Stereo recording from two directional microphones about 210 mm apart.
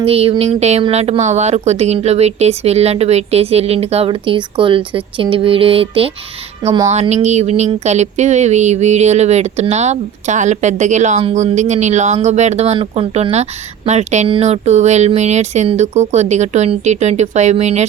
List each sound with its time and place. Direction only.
0.0 s speech: 30° right (ahead or behind)